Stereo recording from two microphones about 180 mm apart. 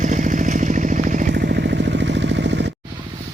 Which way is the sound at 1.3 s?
70° right (ahead or behind).